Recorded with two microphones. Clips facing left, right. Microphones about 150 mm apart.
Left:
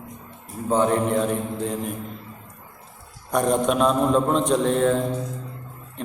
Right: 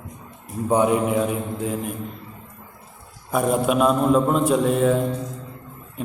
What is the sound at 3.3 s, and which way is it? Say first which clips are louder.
A man's voice: even; 5° right (ahead or behind).